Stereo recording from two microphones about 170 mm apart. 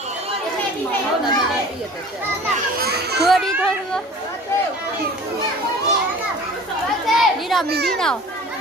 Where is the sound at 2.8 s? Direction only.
70° right (ahead or behind).